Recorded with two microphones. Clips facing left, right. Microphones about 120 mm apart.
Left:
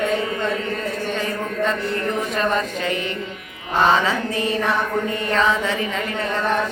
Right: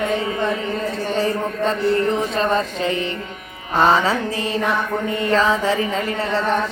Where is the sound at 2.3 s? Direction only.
30° right (ahead or behind).